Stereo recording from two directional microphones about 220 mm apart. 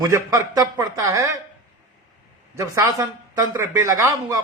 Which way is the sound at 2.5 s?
15° right (ahead or behind).